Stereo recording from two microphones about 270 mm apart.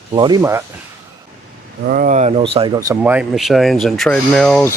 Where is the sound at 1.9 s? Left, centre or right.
Right.